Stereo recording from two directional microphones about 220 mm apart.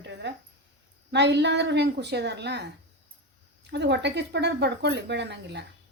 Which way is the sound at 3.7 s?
50° right (ahead or behind).